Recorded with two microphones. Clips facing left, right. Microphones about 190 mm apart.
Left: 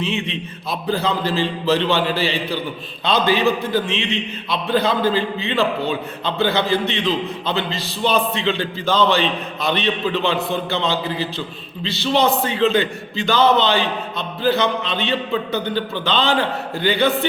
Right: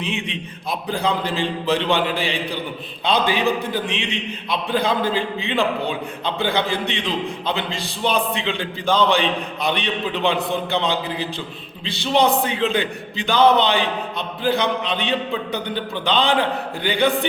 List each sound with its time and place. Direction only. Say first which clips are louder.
0.0 s a man's voice: left 3 dB; 15° right (ahead or behind)